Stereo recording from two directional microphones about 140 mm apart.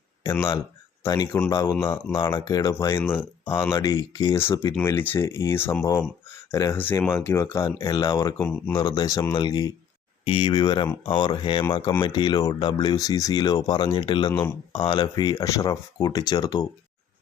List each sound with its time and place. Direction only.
0.3 s speech: 20° left (ahead or behind)
4.7 s speech: 15° left (ahead or behind)
8.4 s speech: 10° left (ahead or behind)
8.7 s speech: 25° left (ahead or behind)